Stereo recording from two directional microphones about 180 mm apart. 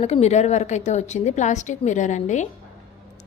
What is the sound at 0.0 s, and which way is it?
A woman's voice, 35° left (ahead or behind).